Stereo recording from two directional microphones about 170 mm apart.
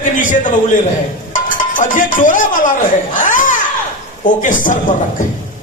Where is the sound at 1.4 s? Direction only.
50° left (ahead or behind).